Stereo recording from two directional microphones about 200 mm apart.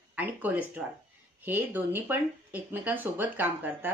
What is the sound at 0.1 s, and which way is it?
Speech, 10° right (ahead or behind).